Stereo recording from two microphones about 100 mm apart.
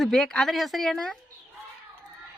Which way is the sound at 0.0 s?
5° left (ahead or behind).